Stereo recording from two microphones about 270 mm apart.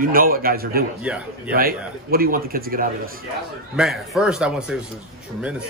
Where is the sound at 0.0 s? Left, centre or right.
Right.